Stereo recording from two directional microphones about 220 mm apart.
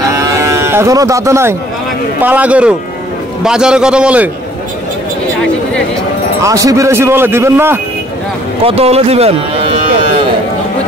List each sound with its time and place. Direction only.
0.1 s moo: 15° right (ahead or behind)
2.2 s a man's voice: 5° right (ahead or behind)
6.4 s speech: 15° right (ahead or behind)
8.6 s speech: 25° right (ahead or behind)